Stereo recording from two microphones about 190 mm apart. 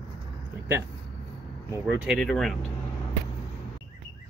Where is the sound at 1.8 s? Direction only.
5° right (ahead or behind).